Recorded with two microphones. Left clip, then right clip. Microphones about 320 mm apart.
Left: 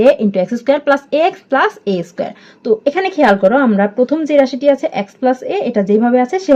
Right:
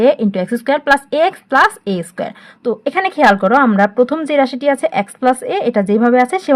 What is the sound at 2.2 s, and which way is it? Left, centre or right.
Speech, right.